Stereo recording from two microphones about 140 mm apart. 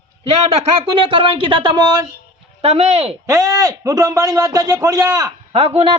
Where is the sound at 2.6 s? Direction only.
50° right (ahead or behind).